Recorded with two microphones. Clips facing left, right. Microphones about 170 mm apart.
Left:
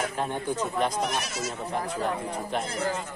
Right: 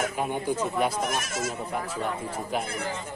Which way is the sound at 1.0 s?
50° right (ahead or behind).